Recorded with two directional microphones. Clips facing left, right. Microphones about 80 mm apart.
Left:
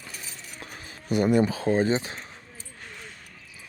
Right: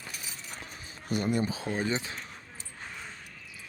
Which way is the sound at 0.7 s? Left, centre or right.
Left.